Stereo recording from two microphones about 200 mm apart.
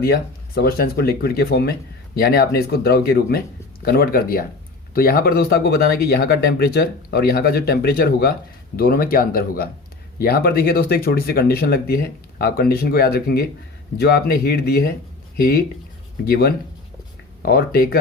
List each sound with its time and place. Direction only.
0.0 s speech: 50° left (ahead or behind)